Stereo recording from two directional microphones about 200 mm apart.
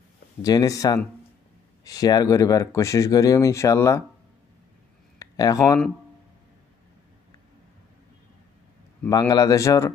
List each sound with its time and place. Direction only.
0.4 s speech: 15° left (ahead or behind)
5.2 s speech: 15° left (ahead or behind)
9.3 s speech: 15° left (ahead or behind)